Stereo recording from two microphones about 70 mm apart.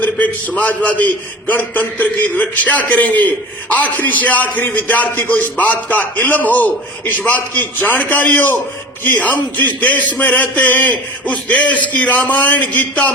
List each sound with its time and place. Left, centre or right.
0.0 s a man's voice: left